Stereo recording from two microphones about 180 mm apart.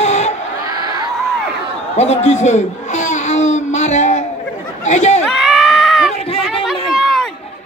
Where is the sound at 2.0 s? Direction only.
35° left (ahead or behind).